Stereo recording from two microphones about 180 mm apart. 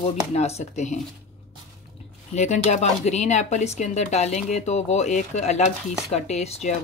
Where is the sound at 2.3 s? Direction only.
40° left (ahead or behind).